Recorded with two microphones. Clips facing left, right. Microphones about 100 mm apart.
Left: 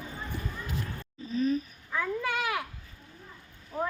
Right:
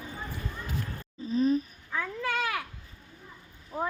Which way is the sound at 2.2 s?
15° left (ahead or behind).